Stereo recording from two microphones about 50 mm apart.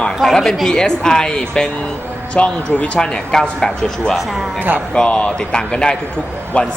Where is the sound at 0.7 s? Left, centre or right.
Centre.